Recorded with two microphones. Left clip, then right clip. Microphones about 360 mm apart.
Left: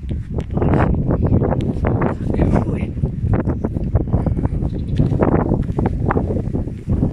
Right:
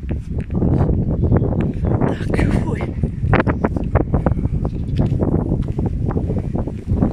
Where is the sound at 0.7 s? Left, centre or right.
Left.